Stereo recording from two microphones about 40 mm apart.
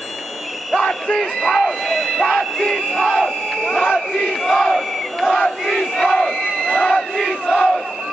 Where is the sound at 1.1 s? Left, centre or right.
Centre.